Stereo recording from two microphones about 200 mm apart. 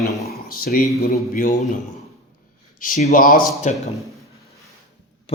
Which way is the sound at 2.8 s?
40° left (ahead or behind).